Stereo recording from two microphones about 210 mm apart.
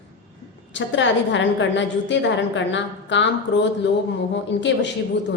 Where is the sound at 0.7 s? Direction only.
60° left (ahead or behind).